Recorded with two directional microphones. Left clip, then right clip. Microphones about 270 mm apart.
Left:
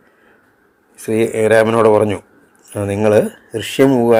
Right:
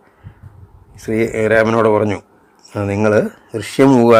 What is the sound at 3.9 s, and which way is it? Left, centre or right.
Speech, right.